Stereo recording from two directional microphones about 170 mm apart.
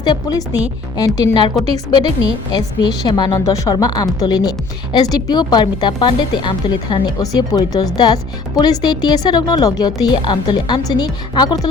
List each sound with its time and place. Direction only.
0.0 s a woman's voice: 20° left (ahead or behind)